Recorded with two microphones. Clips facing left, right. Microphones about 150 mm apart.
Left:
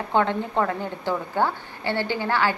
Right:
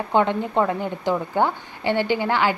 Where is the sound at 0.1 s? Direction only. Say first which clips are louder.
Right 2 dB; 15° right (ahead or behind).